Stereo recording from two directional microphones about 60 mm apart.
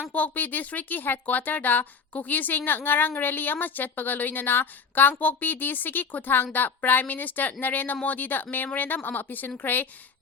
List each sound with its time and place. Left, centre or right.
0.1 s speech: left